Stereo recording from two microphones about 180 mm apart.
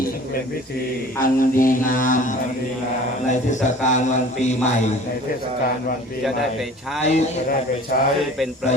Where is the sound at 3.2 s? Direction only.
45° left (ahead or behind).